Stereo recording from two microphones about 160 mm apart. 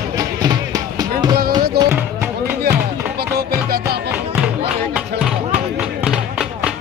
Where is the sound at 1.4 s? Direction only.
70° right (ahead or behind).